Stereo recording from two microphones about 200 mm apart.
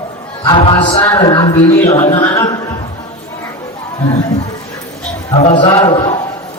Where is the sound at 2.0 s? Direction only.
30° left (ahead or behind).